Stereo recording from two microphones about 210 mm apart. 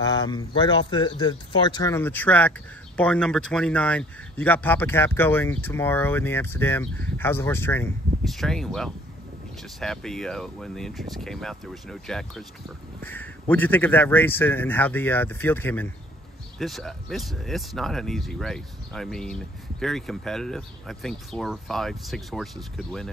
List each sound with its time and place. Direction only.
0.0 s speech: 20° left (ahead or behind); by 23.0 s centre (ahead or behind)